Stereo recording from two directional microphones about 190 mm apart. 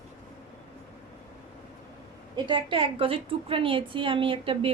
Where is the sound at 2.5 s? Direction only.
30° right (ahead or behind).